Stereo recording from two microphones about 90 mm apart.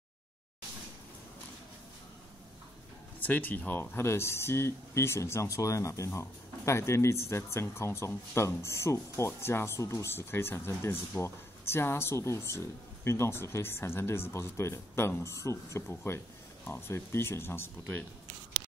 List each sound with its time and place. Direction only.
3.2 s speech: 20° left (ahead or behind)